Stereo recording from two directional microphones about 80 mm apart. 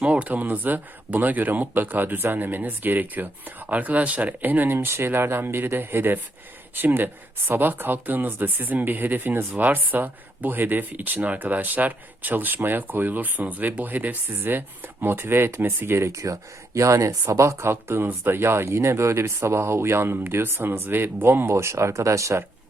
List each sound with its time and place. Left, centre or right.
0.0 s speech: centre; by 22.4 s right